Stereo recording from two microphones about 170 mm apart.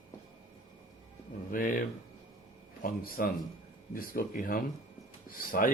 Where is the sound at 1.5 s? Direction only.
55° left (ahead or behind).